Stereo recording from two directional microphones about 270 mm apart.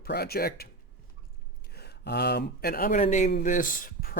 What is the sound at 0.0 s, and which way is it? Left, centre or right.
Speech, left.